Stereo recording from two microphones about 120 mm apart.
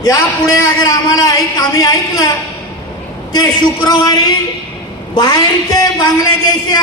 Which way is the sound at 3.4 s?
35° left (ahead or behind).